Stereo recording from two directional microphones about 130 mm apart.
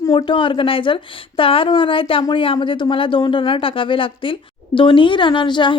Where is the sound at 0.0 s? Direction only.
35° left (ahead or behind).